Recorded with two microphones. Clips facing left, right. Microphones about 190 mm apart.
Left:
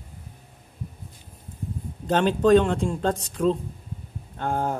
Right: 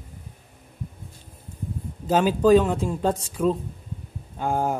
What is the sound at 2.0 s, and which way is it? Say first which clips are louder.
Speech: right 1 dB; 5° right (ahead or behind).